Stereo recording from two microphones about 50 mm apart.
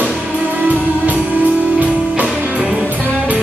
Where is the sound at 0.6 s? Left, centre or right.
Right.